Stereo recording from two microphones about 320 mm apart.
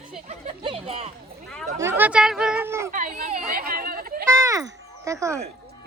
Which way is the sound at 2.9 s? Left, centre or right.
Right.